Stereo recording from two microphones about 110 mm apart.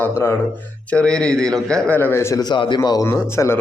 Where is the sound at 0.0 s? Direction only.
20° left (ahead or behind).